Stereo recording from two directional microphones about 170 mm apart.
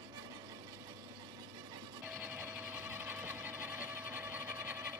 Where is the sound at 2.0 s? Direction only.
5° right (ahead or behind).